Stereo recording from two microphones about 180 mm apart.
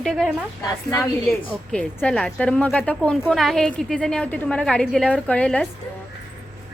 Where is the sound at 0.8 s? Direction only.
20° left (ahead or behind).